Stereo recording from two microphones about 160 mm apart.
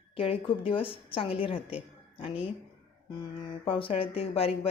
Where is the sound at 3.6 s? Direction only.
35° left (ahead or behind).